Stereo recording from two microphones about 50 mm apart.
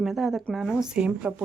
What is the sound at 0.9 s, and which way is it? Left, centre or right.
Speech, right.